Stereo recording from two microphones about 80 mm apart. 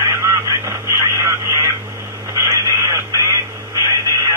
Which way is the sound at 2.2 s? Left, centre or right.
Right.